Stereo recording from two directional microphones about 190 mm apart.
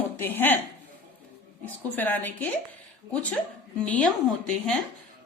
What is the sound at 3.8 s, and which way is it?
Speech, 5° left (ahead or behind).